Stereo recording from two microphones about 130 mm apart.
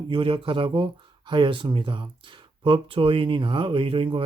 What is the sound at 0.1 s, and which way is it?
Speech, 40° right (ahead or behind).